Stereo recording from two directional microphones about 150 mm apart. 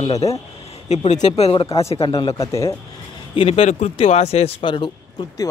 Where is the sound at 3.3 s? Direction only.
40° left (ahead or behind).